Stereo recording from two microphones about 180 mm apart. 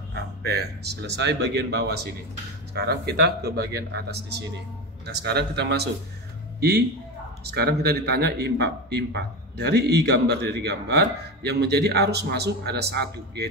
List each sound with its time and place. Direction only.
0.1 s speech: 65° right (ahead or behind)
7.4 s speech: 65° right (ahead or behind)